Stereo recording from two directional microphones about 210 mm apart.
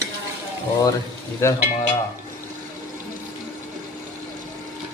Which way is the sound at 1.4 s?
10° left (ahead or behind).